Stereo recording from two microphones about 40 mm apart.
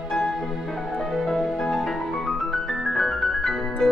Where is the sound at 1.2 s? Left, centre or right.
Centre.